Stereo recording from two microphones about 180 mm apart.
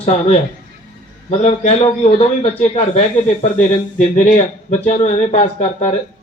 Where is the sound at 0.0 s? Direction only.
35° left (ahead or behind).